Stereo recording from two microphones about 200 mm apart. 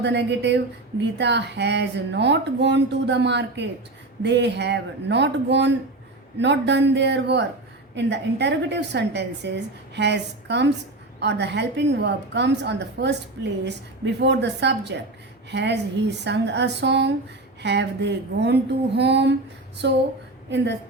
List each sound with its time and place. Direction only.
0.0 s a woman's voice: 60° right (ahead or behind)